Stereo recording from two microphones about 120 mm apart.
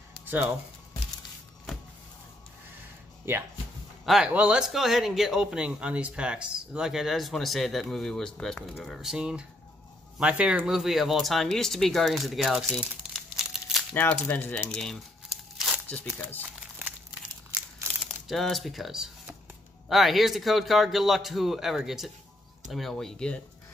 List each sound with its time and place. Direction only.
0.2 s speech: 15° right (ahead or behind)
3.3 s speech: 20° right (ahead or behind)
4.0 s a man's voice: centre (ahead or behind)
10.7 s speech: centre (ahead or behind)
12.7 s crumpling: centre (ahead or behind)
13.9 s speech: 15° left (ahead or behind); by 15.8 s centre (ahead or behind)
16.2 s speech: 15° left (ahead or behind)
16.4 s crumpling: 10° right (ahead or behind)
18.3 s speech: centre (ahead or behind)